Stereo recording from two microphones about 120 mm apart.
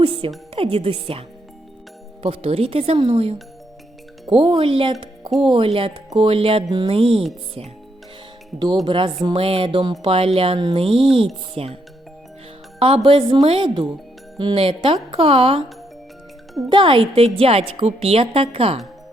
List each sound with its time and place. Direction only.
0.0 s music: 50° right (ahead or behind)
0.5 s a woman's voice: 50° right (ahead or behind)
2.2 s a woman's voice: 55° right (ahead or behind)
8.8 s a woman's voice: 40° right (ahead or behind)
12.8 s a woman's voice: 50° right (ahead or behind)
16.6 s a woman's voice: 45° right (ahead or behind)